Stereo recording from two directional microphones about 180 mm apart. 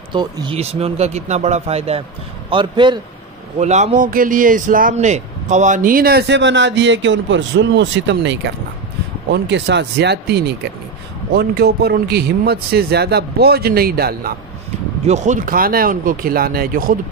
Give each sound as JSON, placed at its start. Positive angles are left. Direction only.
{"t": 0.1, "sound": "speech", "side_deg": -25}
{"t": 3.5, "sound": "a man's voice", "side_deg": -40}
{"t": 15.0, "sound": "a man's voice", "side_deg": -40}